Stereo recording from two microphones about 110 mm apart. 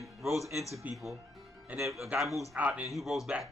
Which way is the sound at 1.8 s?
Centre (ahead or behind).